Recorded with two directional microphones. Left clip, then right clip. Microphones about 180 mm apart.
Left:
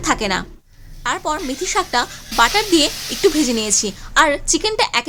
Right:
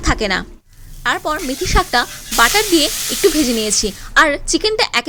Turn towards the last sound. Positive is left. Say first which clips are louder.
# right 2 dB
turn(degrees=-15)  # may be behind; listen again after turning